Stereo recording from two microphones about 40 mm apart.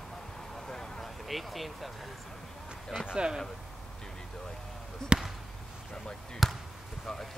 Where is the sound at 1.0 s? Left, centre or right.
Centre.